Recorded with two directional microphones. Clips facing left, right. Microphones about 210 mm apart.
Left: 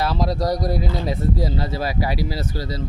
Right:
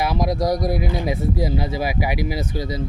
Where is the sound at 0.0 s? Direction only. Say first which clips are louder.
Right 1 dB; 15° right (ahead or behind).